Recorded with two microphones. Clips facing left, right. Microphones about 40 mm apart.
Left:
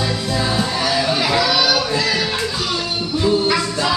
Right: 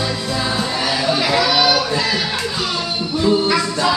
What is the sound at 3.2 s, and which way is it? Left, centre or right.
Music, centre.